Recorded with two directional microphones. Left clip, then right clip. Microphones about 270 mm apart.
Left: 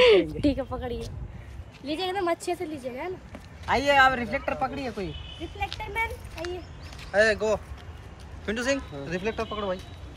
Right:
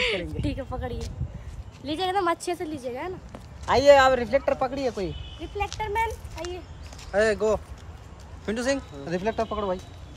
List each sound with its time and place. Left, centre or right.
0.0 s a woman's voice: centre
0.7 s speech: centre
2.1 s speech: centre
3.6 s speech: right
5.4 s speech: centre
7.1 s speech: right